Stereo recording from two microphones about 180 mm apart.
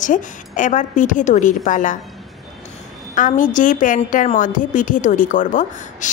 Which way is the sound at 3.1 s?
45° left (ahead or behind).